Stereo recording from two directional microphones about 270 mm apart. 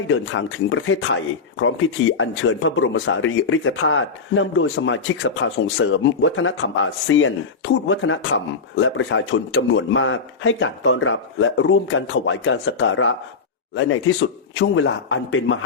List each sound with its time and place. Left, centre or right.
0.1 s speech: left